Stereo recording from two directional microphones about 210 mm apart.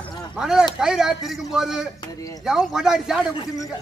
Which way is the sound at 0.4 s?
5° right (ahead or behind).